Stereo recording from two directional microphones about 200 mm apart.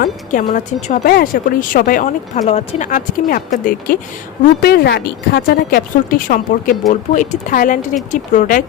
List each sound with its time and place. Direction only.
0.0 s speech: 40° left (ahead or behind)
2.4 s speech: 30° left (ahead or behind)